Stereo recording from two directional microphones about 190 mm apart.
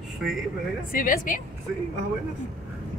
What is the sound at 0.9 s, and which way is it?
Speech, 50° left (ahead or behind).